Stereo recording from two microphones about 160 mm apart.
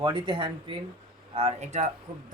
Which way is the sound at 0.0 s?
30° right (ahead or behind).